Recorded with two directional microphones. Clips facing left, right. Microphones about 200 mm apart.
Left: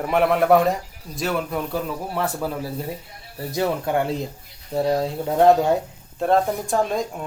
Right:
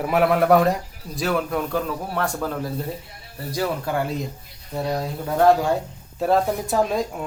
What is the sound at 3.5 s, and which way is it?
Speech, 25° left (ahead or behind).